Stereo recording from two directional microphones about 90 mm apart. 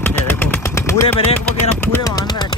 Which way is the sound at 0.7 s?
30° left (ahead or behind).